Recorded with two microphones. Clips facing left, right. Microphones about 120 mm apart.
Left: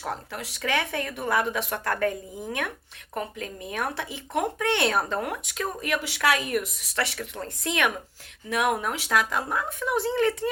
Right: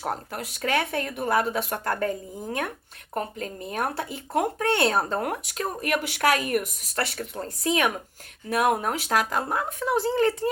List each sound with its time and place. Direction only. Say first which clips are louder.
0.0 s speech: right 2 dB; 45° right (ahead or behind)